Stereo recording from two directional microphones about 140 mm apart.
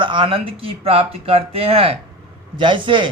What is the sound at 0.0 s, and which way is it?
A man's voice, 35° right (ahead or behind).